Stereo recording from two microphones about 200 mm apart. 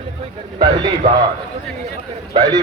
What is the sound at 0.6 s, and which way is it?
Speech, 20° right (ahead or behind).